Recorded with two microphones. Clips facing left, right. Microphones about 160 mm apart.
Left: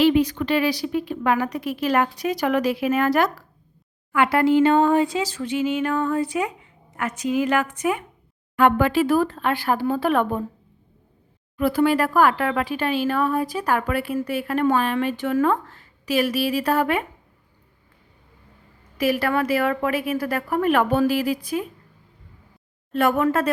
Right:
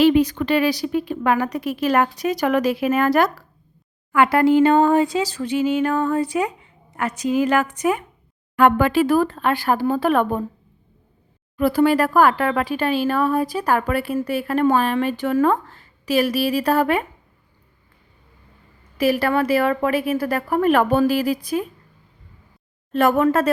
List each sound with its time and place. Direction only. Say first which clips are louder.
0.0 s a woman's voice: right 2 dB; 45° right (ahead or behind)
8.5 s a woman's voice: right 2 dB; 50° right (ahead or behind)
11.5 s speech: right 3 dB; 35° right (ahead or behind)
18.9 s speech: right 3 dB; 30° right (ahead or behind)
23.0 s speech: right 3 dB; 40° right (ahead or behind)